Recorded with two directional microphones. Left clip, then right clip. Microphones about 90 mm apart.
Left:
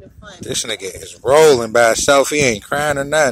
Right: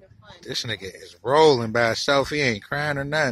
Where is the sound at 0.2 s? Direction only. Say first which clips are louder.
Left 10 dB; 15° left (ahead or behind).